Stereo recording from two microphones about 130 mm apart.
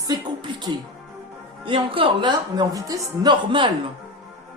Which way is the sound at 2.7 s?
30° right (ahead or behind).